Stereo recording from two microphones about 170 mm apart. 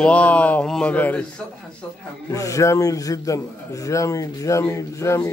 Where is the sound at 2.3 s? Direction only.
20° left (ahead or behind).